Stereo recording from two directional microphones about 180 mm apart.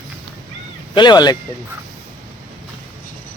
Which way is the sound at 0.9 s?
25° left (ahead or behind).